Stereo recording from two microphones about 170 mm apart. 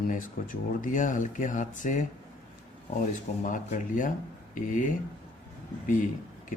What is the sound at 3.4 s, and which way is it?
Speech, 50° left (ahead or behind).